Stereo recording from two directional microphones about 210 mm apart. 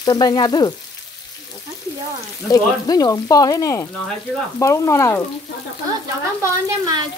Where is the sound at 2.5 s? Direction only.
15° left (ahead or behind).